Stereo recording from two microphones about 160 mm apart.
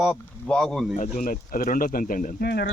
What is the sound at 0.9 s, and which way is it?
Speech, 50° left (ahead or behind).